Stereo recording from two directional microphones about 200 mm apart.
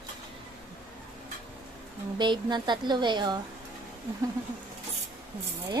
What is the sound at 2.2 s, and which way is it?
A woman's voice, 20° right (ahead or behind).